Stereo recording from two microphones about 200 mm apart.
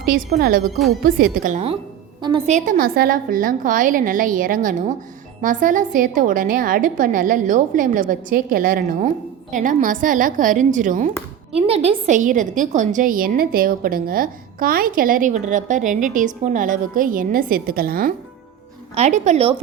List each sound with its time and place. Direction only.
0.3 s a woman's voice: 50° right (ahead or behind)
11.5 s a woman's voice: 30° right (ahead or behind); by 18.1 s 45° right (ahead or behind)
18.9 s a woman's voice: 35° right (ahead or behind)